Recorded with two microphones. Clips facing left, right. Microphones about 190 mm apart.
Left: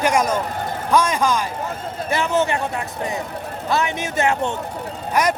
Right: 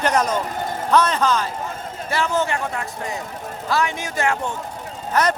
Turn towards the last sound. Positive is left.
turn(degrees=10)  # may be behind; listen again after turning